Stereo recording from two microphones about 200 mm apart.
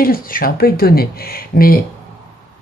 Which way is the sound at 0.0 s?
45° left (ahead or behind).